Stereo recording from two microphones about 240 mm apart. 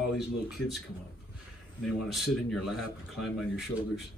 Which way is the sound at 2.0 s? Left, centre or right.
Centre.